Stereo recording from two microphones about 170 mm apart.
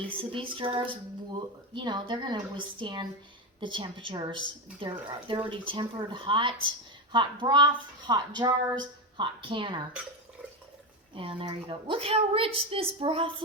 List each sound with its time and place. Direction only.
0.2 s a woman's voice: 30° right (ahead or behind)
11.1 s a woman's voice: 30° right (ahead or behind)